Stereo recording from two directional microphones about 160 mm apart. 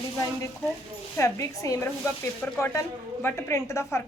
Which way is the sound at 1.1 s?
20° left (ahead or behind).